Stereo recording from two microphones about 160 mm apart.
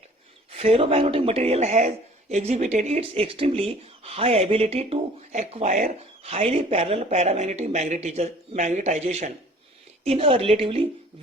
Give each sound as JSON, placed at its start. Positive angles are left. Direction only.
{"t": 0.5, "sound": "speech", "side_deg": -35}